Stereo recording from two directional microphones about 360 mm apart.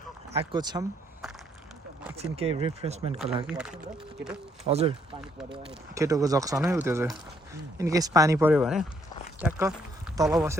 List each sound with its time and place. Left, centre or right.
0.3 s speech: centre
2.1 s speech: centre
3.4 s speech: centre
4.6 s speech: centre